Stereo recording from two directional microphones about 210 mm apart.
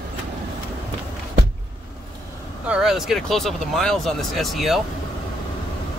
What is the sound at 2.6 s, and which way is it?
Speech, 5° right (ahead or behind).